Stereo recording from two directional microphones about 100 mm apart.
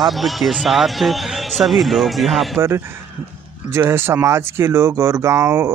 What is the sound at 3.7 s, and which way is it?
Speech, 25° right (ahead or behind).